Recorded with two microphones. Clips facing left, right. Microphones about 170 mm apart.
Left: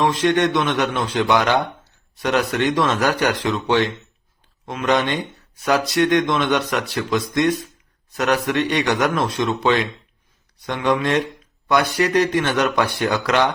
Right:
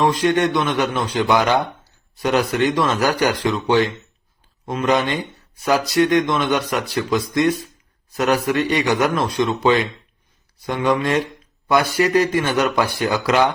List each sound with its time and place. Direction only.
0.0 s speech: centre (ahead or behind)